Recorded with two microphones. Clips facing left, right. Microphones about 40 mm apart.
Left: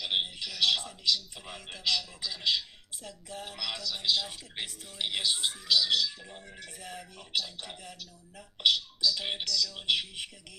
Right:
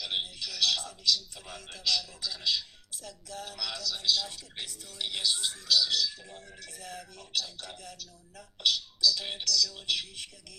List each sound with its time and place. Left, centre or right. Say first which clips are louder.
0.0 s a man's voice: left 3 dB; left